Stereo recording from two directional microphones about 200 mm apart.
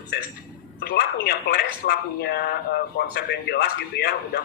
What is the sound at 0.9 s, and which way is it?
Speech, 55° left (ahead or behind).